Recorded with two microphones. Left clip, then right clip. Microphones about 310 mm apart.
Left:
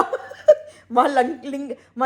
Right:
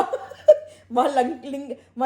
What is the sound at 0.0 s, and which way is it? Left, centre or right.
Speech, centre.